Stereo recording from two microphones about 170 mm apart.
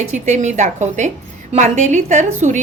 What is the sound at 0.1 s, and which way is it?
A woman's voice, 45° right (ahead or behind).